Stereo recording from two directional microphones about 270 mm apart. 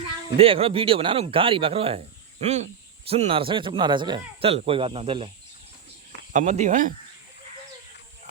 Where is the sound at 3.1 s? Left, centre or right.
Right.